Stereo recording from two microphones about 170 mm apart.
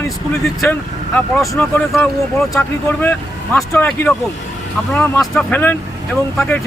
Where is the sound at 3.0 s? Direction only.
10° left (ahead or behind).